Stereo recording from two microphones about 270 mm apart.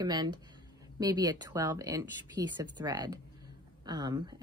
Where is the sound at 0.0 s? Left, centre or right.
Centre.